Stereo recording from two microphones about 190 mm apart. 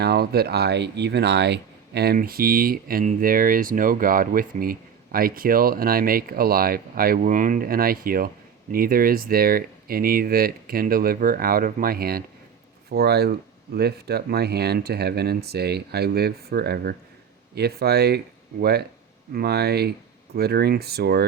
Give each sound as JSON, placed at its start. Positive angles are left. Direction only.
{"t": 0.0, "sound": "speech", "side_deg": -55}